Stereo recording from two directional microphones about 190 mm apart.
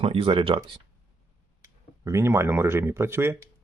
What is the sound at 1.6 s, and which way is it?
A man's voice, 15° right (ahead or behind).